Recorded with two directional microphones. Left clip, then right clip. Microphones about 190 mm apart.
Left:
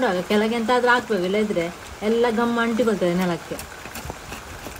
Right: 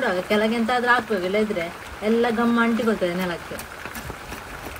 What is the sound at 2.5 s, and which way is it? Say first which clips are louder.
Speech: even; 50° left (ahead or behind).